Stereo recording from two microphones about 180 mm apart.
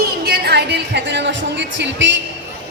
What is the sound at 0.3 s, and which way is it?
Speech, 65° right (ahead or behind).